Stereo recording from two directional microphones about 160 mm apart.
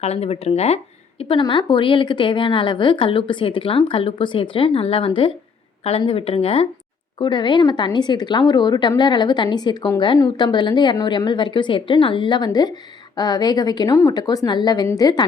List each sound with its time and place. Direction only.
0.0 s speech: 40° left (ahead or behind)